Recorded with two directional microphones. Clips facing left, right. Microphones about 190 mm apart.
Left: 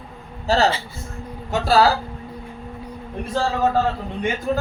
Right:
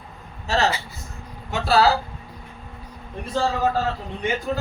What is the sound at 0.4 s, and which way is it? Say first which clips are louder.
Speech: left 4 dB; 35° left (ahead or behind).